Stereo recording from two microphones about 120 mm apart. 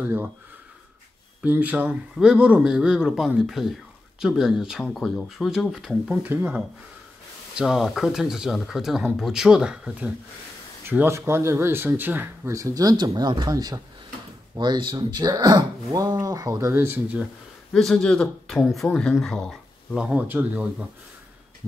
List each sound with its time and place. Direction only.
0.0 s speech: 20° right (ahead or behind)
1.4 s speech: 15° right (ahead or behind)
6.2 s speech: 15° right (ahead or behind)
7.5 s speech: 5° right (ahead or behind)
17.7 s speech: 5° left (ahead or behind)
20.0 s speech: 10° right (ahead or behind)